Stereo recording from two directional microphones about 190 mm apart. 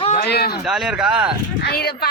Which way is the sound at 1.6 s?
55° left (ahead or behind).